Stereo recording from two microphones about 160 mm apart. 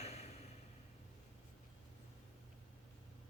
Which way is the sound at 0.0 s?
40° left (ahead or behind).